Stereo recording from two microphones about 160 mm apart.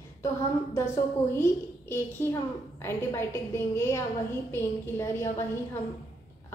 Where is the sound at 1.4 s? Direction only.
15° left (ahead or behind).